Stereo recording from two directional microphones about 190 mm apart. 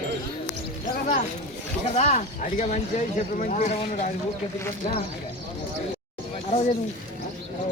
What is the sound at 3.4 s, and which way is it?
Speech, 40° left (ahead or behind).